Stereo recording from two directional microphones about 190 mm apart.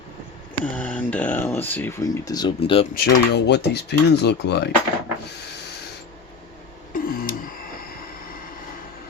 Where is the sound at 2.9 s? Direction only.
55° left (ahead or behind).